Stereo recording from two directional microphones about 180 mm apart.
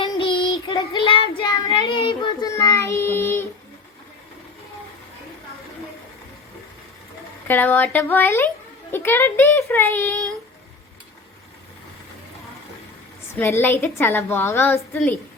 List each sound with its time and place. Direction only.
0.0 s child singing: 30° left (ahead or behind); by 3.4 s 15° left (ahead or behind)
7.4 s speech: 10° left (ahead or behind)
13.4 s speech: 10° left (ahead or behind)